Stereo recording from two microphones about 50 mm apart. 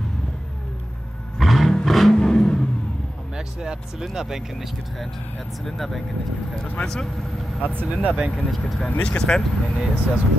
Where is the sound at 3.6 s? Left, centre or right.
Centre.